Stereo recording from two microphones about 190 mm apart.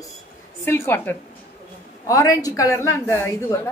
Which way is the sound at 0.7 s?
10° left (ahead or behind).